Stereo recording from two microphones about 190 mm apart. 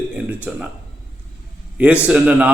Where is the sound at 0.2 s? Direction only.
5° right (ahead or behind).